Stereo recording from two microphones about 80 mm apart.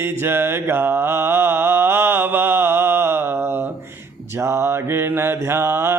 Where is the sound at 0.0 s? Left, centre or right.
Right.